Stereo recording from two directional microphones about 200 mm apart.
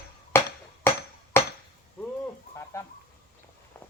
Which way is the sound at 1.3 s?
10° left (ahead or behind).